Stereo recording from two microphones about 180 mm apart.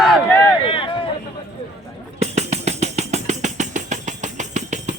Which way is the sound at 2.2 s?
40° right (ahead or behind).